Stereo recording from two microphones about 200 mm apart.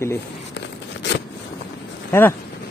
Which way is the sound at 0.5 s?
60° left (ahead or behind).